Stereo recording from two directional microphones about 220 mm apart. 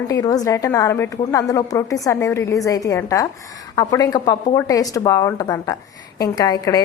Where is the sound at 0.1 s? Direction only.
15° left (ahead or behind).